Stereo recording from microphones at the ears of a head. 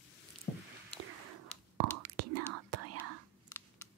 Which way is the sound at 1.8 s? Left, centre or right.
Right.